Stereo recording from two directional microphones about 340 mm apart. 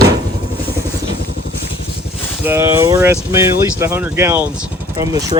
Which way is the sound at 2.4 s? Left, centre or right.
Centre.